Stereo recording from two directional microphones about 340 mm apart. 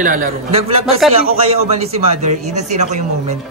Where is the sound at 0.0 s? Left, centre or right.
Right.